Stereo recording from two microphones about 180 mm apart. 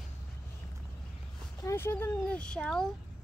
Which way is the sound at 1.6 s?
15° left (ahead or behind).